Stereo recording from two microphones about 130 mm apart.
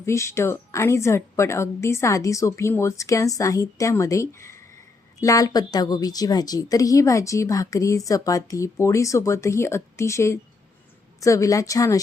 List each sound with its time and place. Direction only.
0.0 s a woman's voice: 20° left (ahead or behind)